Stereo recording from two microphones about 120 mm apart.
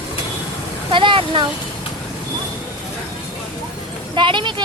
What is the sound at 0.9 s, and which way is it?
Speech, 45° right (ahead or behind).